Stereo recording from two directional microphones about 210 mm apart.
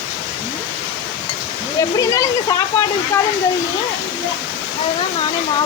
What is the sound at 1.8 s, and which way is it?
Speech, 15° left (ahead or behind).